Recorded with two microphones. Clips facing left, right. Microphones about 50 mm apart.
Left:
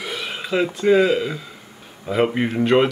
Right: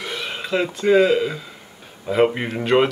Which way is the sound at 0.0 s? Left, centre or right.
Centre.